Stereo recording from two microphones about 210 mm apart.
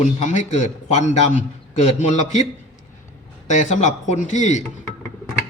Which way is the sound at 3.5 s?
35° left (ahead or behind).